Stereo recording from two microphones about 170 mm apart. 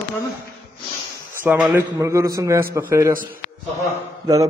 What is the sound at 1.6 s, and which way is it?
A man's voice, 10° right (ahead or behind).